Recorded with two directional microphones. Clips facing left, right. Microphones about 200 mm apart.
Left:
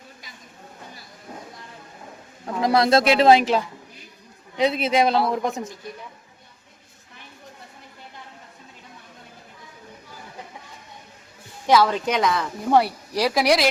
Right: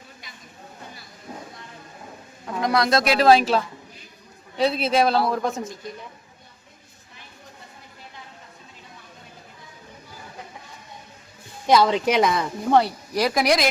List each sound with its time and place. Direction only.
2.6 s a woman's voice: 30° left (ahead or behind)
11.6 s a woman's voice: 15° right (ahead or behind)
12.7 s a woman's voice: 10° left (ahead or behind)